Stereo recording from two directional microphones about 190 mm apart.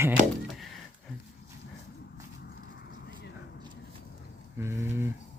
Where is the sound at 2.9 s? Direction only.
75° left (ahead or behind).